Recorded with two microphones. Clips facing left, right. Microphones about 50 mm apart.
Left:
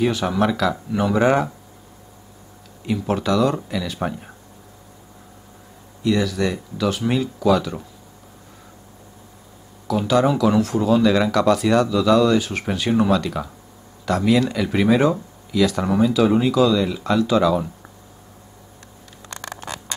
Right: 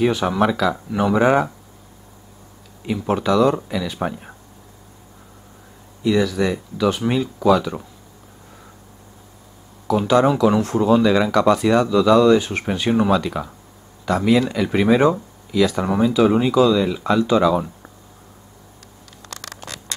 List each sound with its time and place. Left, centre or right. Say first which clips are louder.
0.0 s speech: right 2 dB; centre
2.9 s speech: right 2 dB; centre
6.0 s speech: right 2 dB; centre
9.8 s speech: right 2 dB; centre
19.2 s patter: left 3 dB; centre